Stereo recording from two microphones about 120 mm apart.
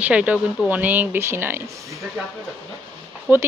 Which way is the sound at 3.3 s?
15° right (ahead or behind).